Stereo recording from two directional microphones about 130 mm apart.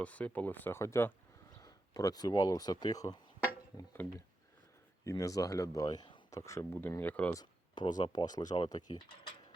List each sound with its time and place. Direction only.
0.0 s speech: 10° left (ahead or behind); by 3.2 s 30° left (ahead or behind)
5.0 s speech: 25° left (ahead or behind)
6.3 s speech: 25° left (ahead or behind)
7.3 s speech: 30° left (ahead or behind)